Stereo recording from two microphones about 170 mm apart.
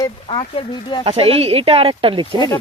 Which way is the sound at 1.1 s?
35° right (ahead or behind).